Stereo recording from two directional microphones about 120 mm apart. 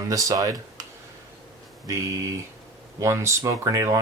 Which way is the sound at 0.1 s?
30° right (ahead or behind).